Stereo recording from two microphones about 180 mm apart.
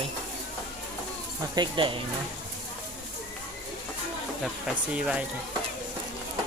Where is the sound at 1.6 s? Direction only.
25° right (ahead or behind).